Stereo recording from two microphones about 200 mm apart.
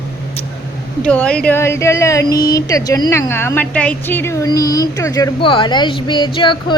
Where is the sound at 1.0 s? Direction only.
5° left (ahead or behind).